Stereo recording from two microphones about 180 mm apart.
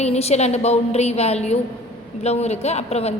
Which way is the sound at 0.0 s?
35° left (ahead or behind).